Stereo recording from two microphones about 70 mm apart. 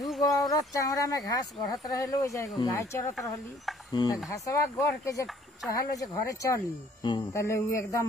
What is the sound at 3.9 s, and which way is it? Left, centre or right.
Speech, left.